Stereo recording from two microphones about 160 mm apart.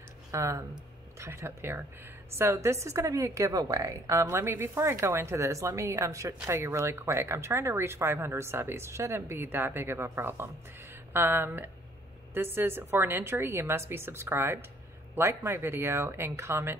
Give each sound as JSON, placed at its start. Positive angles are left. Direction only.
{"t": 0.3, "sound": "a woman's voice", "side_deg": -20}